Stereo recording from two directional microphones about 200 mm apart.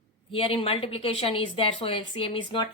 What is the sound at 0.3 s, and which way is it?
Speech, 25° left (ahead or behind).